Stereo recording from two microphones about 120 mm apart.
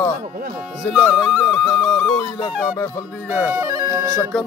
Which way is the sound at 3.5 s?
30° right (ahead or behind).